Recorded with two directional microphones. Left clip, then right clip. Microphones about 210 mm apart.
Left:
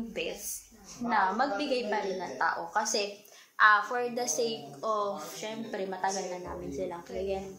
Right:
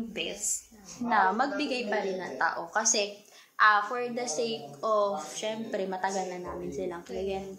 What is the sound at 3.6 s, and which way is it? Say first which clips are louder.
A woman's voice: even; centre (ahead or behind).